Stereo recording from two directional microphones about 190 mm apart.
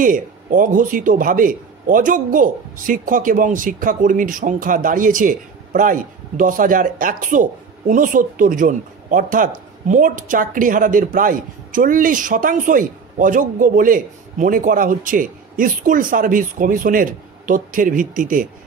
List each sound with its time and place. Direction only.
0.0 s a man's voice: 45° right (ahead or behind)